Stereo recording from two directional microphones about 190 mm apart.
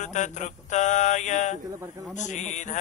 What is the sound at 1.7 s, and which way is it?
Speech, 15° right (ahead or behind).